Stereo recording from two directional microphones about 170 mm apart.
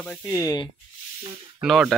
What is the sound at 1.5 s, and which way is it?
Speech, 5° right (ahead or behind).